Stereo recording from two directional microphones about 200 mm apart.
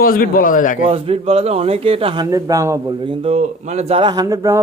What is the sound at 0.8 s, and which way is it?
Speech, 30° right (ahead or behind).